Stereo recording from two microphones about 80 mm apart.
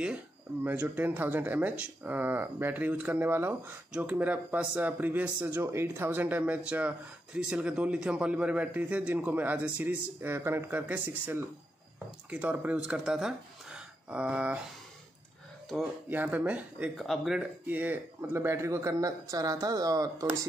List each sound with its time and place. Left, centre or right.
0.7 s speech: centre
3.9 s speech: centre
16.1 s speech: right
16.9 s speech: centre
17.4 s speech: right